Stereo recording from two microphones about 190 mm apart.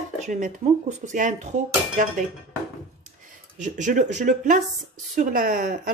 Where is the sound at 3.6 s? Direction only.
40° right (ahead or behind).